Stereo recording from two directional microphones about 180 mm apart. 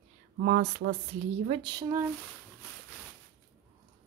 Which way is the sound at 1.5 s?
25° right (ahead or behind).